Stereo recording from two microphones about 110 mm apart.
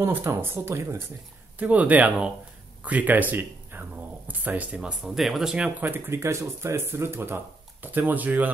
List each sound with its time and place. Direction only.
0.0 s speech: 20° right (ahead or behind); by 5.7 s 5° right (ahead or behind)
5.8 s speech: 20° right (ahead or behind)